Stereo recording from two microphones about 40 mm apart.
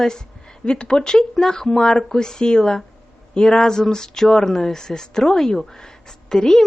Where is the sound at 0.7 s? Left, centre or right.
Left.